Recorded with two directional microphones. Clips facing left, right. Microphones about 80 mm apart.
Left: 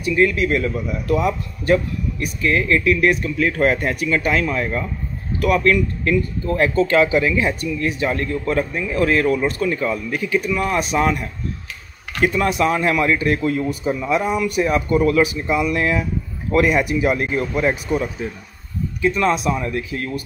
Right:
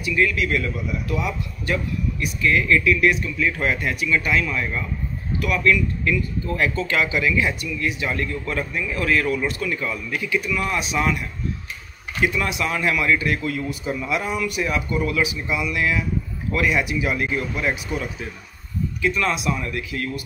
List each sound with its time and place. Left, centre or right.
0.0 s a man's voice: left
14.5 s a man's voice: left